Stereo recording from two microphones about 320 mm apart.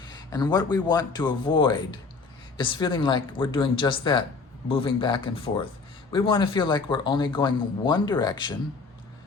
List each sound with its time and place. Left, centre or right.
0.2 s speech: centre